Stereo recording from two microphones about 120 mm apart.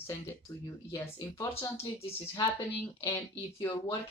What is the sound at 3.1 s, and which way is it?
Speech, 25° left (ahead or behind).